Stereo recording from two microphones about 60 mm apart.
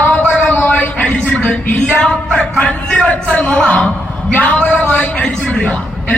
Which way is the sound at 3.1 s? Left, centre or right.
Left.